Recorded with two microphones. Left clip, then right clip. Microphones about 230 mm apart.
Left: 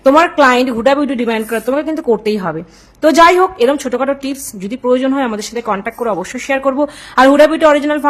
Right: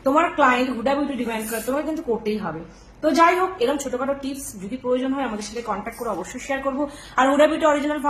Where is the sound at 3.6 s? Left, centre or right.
Left.